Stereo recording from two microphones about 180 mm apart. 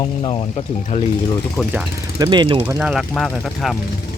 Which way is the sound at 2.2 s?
25° right (ahead or behind).